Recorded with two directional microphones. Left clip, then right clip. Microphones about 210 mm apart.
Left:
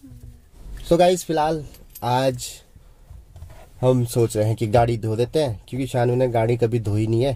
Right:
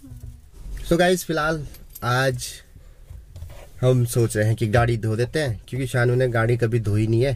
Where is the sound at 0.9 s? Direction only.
15° left (ahead or behind).